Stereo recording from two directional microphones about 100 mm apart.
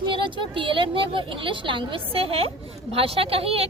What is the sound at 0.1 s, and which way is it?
A woman's voice, 55° right (ahead or behind).